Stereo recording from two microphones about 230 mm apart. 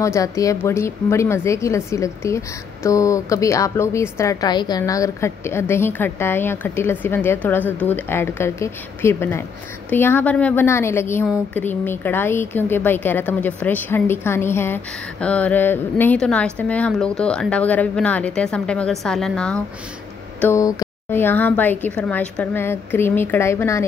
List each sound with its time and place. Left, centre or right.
0.0 s a woman's voice: centre